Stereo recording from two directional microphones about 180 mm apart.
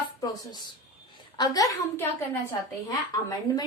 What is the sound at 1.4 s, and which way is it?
A woman's voice, 20° left (ahead or behind).